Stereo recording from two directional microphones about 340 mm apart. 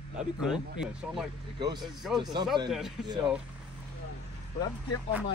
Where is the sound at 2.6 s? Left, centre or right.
Centre.